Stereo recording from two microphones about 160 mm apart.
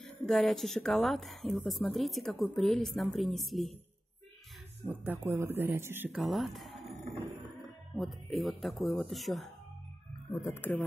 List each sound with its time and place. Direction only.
0.0 s a woman's voice: centre (ahead or behind)
4.8 s speech: 10° right (ahead or behind)
6.2 s speech: centre (ahead or behind)
7.9 s a woman's voice: centre (ahead or behind)
10.3 s speech: 15° left (ahead or behind)